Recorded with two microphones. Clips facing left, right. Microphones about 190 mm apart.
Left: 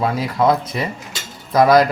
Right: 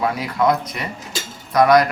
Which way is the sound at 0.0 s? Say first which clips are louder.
Left 2 dB; 30° left (ahead or behind).